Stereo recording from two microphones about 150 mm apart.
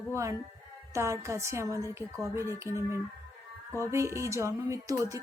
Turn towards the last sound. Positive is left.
turn(degrees=-20)  # may be behind; listen again after turning